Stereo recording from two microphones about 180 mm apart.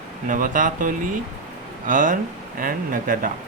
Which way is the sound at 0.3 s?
50° right (ahead or behind).